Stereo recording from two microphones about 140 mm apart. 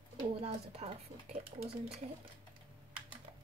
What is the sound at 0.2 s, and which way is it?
Speech, 45° right (ahead or behind).